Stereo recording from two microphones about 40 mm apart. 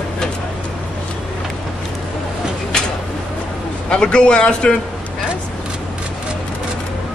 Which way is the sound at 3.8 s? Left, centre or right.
Left.